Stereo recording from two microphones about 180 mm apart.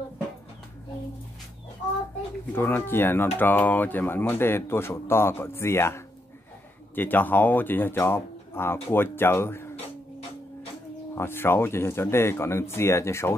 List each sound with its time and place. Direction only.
2.5 s speech: 10° left (ahead or behind)
11.1 s speech: 15° left (ahead or behind)